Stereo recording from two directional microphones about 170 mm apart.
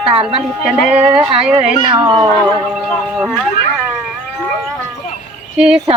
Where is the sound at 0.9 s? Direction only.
10° right (ahead or behind).